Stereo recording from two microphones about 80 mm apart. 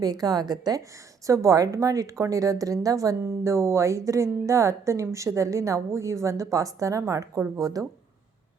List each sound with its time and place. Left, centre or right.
0.0 s a woman's voice: right
1.3 s a woman's voice: right